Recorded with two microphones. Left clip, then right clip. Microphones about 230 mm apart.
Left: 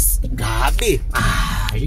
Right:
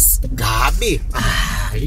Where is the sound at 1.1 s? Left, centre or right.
Centre.